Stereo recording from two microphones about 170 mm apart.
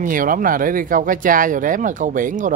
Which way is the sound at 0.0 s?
55° right (ahead or behind).